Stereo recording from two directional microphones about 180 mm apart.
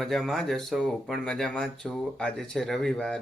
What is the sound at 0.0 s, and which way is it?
Speech, centre (ahead or behind).